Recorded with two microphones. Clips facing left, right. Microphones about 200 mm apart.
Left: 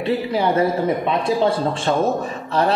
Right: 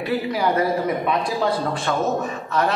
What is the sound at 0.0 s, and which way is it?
A man's voice, 25° left (ahead or behind).